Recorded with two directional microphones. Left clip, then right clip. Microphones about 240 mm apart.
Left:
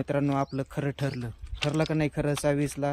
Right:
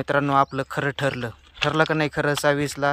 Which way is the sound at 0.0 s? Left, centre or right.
Right.